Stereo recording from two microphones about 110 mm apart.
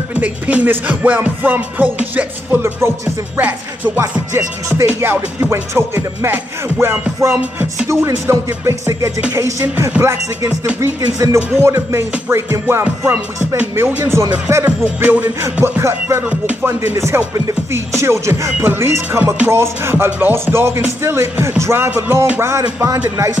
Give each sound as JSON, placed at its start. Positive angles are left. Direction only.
{"t": 0.1, "sound": "music", "side_deg": -10}